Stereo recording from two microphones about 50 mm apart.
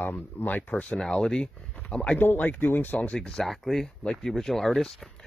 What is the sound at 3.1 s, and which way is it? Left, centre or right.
Speech, centre.